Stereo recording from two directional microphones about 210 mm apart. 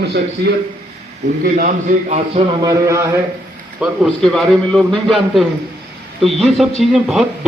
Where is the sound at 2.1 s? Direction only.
30° right (ahead or behind).